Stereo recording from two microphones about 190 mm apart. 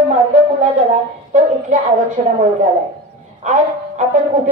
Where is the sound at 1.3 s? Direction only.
40° right (ahead or behind).